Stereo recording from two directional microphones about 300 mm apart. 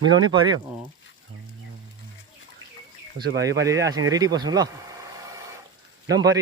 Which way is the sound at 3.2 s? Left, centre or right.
Right.